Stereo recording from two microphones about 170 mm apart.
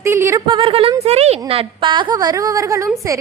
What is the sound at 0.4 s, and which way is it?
Speech, 30° right (ahead or behind).